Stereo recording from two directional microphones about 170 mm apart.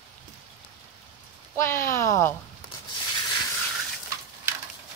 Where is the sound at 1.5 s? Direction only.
15° left (ahead or behind).